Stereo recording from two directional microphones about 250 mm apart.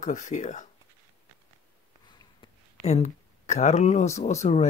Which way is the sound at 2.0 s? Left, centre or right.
Left.